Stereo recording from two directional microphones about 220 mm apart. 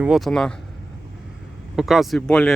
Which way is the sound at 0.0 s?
Centre (ahead or behind).